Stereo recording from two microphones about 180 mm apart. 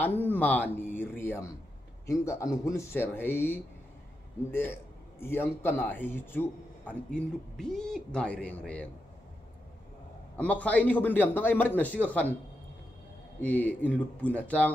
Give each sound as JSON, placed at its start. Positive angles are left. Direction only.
{"t": 0.0, "sound": "a man's voice", "side_deg": 10}
{"t": 10.3, "sound": "a man's voice", "side_deg": 10}
{"t": 13.4, "sound": "a man's voice", "side_deg": 10}